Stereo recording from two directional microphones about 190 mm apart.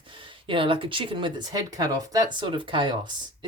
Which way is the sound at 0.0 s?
25° right (ahead or behind).